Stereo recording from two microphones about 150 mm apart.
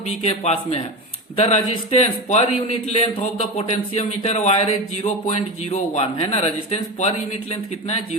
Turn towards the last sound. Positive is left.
turn(degrees=45)  # may be behind; listen again after turning